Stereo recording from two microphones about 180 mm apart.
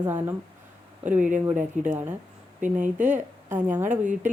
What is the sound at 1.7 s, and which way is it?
Speech, 45° right (ahead or behind).